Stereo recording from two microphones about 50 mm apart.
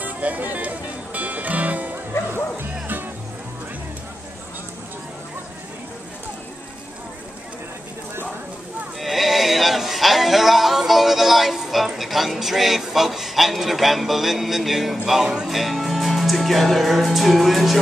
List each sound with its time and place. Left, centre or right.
0.0 s music: right
9.0 s a sound: centre
15.0 s music: centre
15.4 s speech: centre